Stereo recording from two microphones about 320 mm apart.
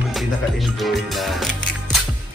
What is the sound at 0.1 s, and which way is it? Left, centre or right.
Music, centre.